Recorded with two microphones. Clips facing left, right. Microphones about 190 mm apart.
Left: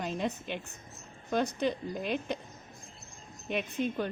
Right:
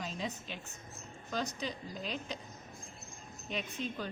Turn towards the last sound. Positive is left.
turn(degrees=60)  # may be behind; listen again after turning